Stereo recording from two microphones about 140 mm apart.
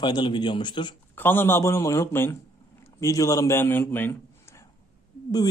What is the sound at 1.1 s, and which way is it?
A man's voice, 15° left (ahead or behind).